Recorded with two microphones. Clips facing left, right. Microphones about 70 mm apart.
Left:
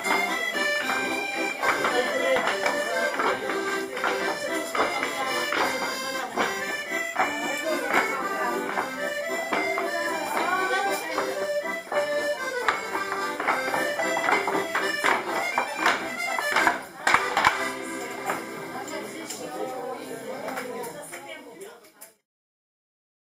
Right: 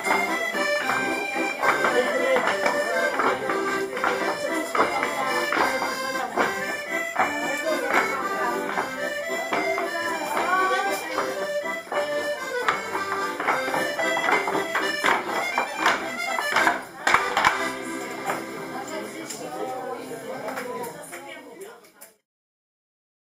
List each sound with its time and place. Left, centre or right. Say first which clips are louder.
0.2 s music: right 2 dB; centre
4.7 s music: right 4 dB; centre
5.9 s accordion: right 3 dB; centre
10.0 s music: right 1 dB; centre
11.7 s accordion: even; centre
12.7 s music: right 2 dB; centre